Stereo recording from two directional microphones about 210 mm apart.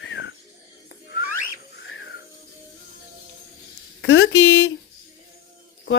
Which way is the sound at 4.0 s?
55° left (ahead or behind).